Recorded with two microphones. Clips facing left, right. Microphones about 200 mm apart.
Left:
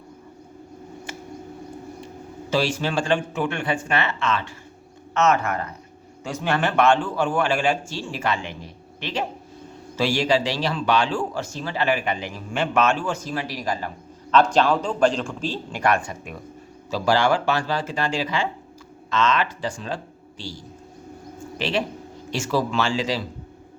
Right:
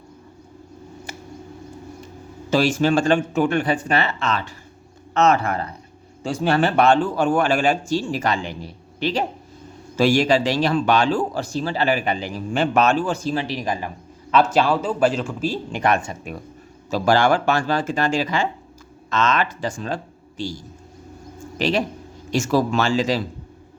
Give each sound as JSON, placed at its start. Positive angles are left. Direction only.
{"t": 2.5, "sound": "a man's voice", "side_deg": -45}
{"t": 10.0, "sound": "a man's voice", "side_deg": -50}
{"t": 15.8, "sound": "speech", "side_deg": -25}
{"t": 16.9, "sound": "speech", "side_deg": -50}
{"t": 21.6, "sound": "a man's voice", "side_deg": -40}